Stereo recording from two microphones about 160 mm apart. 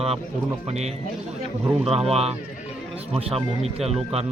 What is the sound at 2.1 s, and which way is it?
Speech, 40° right (ahead or behind).